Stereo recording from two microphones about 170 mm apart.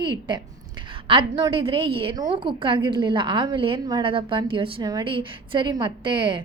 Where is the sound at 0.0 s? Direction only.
25° right (ahead or behind).